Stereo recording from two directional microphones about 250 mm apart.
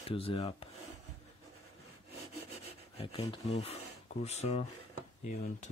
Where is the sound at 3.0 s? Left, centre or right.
Left.